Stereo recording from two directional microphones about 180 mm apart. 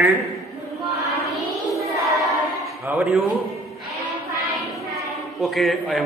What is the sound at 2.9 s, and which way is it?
Speech, 10° right (ahead or behind).